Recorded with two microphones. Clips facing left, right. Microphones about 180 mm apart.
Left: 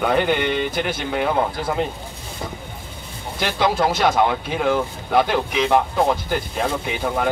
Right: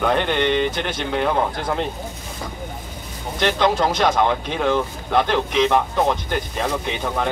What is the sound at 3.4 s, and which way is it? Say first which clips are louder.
Speech: right 1 dB; 5° left (ahead or behind).